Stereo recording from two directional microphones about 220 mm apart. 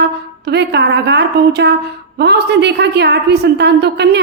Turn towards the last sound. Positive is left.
turn(degrees=-50)  # may be behind; listen again after turning